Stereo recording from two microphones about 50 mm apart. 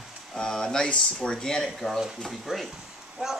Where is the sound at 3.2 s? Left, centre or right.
Right.